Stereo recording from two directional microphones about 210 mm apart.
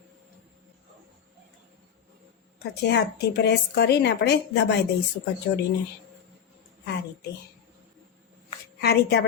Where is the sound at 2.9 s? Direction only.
55° left (ahead or behind).